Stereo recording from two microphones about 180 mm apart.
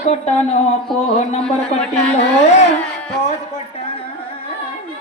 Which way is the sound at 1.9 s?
35° left (ahead or behind).